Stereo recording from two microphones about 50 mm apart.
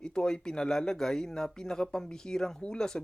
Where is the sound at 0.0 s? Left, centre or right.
Centre.